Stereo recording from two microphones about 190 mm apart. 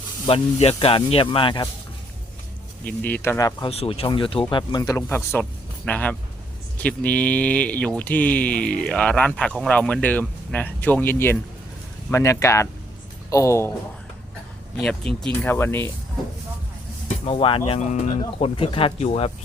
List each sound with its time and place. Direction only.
0.3 s speech: 30° left (ahead or behind)
2.8 s speech: 10° left (ahead or behind)
3.7 s speech: 30° left (ahead or behind); by 13.7 s 15° left (ahead or behind)
15.3 s speech: 10° left (ahead or behind)
17.1 s speech: 30° left (ahead or behind)